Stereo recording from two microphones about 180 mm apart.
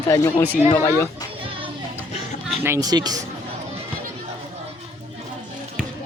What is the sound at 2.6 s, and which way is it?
Speech, 15° right (ahead or behind).